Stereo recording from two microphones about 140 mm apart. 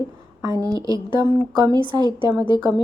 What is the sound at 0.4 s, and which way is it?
A woman's voice, 25° right (ahead or behind).